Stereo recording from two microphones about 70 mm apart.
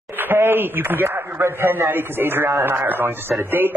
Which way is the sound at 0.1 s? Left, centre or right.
Right.